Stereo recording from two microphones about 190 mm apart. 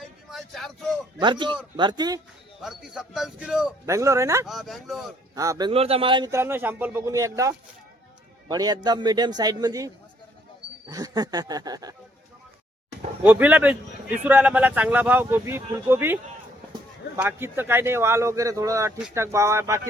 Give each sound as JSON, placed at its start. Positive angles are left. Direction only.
{"t": 0.3, "sound": "vehicle", "side_deg": 0}
{"t": 1.2, "sound": "a man's voice", "side_deg": -25}
{"t": 2.6, "sound": "speech", "side_deg": -5}
{"t": 3.8, "sound": "a man's voice", "side_deg": -15}
{"t": 4.4, "sound": "speech", "side_deg": 0}
{"t": 5.3, "sound": "a man's voice", "side_deg": -20}
{"t": 13.2, "sound": "a man's voice", "side_deg": -10}
{"t": 17.2, "sound": "a man's voice", "side_deg": -10}